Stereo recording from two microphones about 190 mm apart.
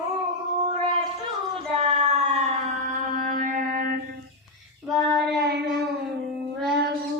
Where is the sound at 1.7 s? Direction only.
30° right (ahead or behind).